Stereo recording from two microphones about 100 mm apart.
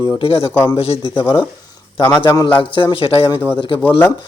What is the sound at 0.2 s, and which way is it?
Speech, 65° left (ahead or behind).